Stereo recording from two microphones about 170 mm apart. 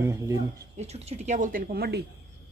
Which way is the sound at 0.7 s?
40° right (ahead or behind).